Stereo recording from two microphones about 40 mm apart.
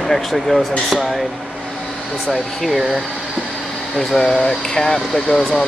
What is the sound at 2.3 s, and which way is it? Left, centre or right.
Speech, centre.